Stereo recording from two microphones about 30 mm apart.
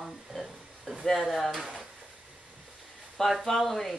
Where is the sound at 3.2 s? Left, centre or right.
Centre.